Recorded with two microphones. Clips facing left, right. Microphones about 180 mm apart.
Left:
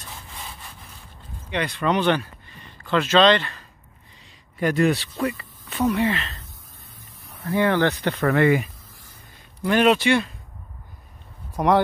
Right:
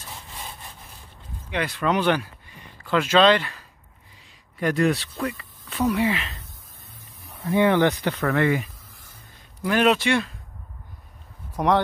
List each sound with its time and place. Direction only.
1.5 s speech: 5° right (ahead or behind)
5.9 s speech: 10° right (ahead or behind)
7.4 s speech: 20° right (ahead or behind)
8.2 s speech: 5° left (ahead or behind)
11.5 s speech: 5° left (ahead or behind)